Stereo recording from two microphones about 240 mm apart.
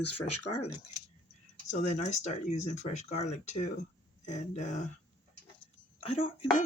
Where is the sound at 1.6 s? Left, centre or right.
Left.